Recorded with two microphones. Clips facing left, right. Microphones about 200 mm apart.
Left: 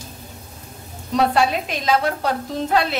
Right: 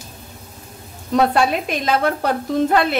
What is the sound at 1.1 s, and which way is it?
A woman's voice, 55° right (ahead or behind).